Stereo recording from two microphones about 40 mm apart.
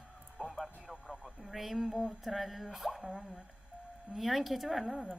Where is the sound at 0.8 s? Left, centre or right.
Centre.